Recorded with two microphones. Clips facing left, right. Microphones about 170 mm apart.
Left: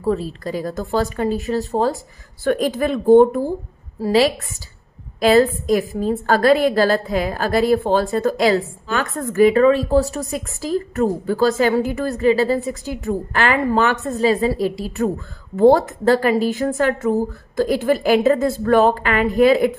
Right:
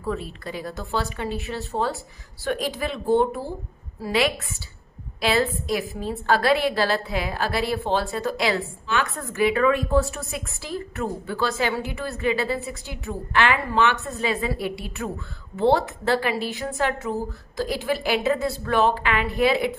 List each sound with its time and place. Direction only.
0.0 s a woman's voice: 35° left (ahead or behind)
4.0 s a woman's voice: 35° left (ahead or behind)